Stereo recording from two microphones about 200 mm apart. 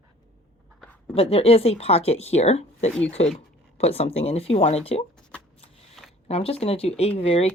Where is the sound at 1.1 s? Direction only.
30° left (ahead or behind).